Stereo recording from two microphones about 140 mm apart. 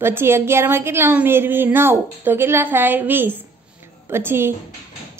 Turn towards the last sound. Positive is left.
turn(degrees=-15)  # may be behind; listen again after turning